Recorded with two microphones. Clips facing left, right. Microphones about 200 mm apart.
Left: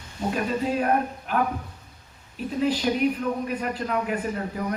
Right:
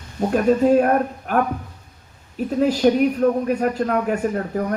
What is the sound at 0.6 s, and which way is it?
Speech, 50° right (ahead or behind).